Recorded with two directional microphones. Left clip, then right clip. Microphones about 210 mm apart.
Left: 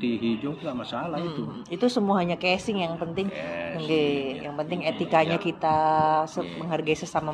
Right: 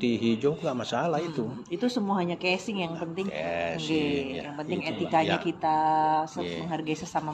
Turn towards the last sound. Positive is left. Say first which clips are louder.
# left 4 dB
turn(degrees=25)  # may be behind; listen again after turning